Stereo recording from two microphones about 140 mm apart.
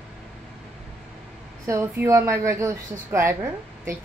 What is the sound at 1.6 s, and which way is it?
Speech, 20° right (ahead or behind).